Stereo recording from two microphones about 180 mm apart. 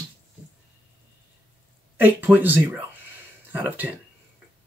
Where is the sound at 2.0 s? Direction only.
10° right (ahead or behind).